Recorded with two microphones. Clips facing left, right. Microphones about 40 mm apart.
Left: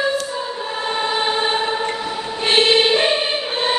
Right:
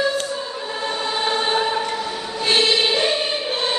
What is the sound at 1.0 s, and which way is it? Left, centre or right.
Choir, left.